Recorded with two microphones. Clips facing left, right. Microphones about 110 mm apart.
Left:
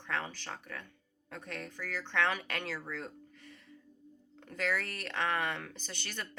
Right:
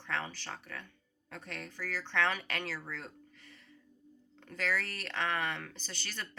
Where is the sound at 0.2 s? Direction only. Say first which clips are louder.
Even; 20° left (ahead or behind).